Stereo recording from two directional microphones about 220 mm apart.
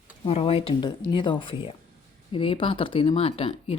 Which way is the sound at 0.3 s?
25° left (ahead or behind).